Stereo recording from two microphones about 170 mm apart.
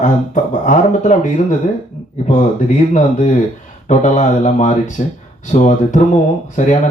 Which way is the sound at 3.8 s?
45° left (ahead or behind).